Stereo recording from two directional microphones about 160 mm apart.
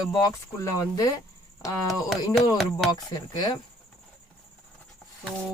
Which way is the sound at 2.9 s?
25° left (ahead or behind).